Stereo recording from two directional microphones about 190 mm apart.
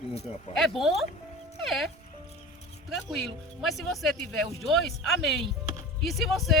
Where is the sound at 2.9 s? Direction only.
Centre (ahead or behind).